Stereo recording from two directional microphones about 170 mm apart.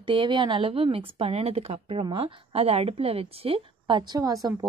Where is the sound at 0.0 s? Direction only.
30° right (ahead or behind).